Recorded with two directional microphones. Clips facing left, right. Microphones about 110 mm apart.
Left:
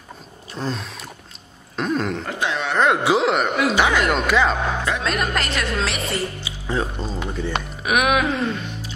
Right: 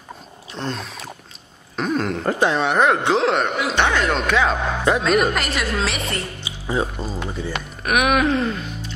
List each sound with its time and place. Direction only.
0.6 s a sound: centre (ahead or behind)
1.8 s cough: centre (ahead or behind)
2.2 s speech: 40° right (ahead or behind)
2.8 s speech: 5° left (ahead or behind)
6.7 s speech: 10° right (ahead or behind)